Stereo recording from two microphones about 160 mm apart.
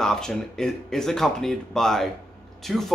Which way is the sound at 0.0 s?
5° left (ahead or behind).